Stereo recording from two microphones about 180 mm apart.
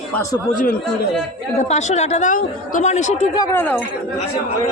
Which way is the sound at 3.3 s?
20° left (ahead or behind).